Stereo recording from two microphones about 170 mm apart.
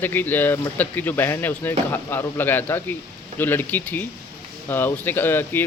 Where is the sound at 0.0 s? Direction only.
10° left (ahead or behind).